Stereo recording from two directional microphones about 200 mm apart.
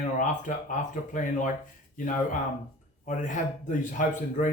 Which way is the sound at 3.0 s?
40° left (ahead or behind).